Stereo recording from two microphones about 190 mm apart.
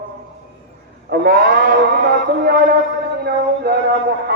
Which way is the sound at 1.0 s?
55° right (ahead or behind).